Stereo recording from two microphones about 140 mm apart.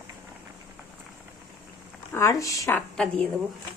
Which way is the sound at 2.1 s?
20° left (ahead or behind).